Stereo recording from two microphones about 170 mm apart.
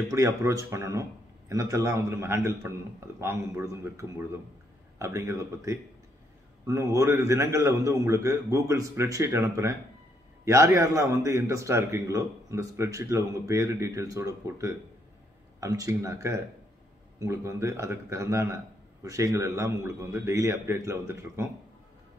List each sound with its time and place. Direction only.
0.1 s a man's voice: 20° right (ahead or behind)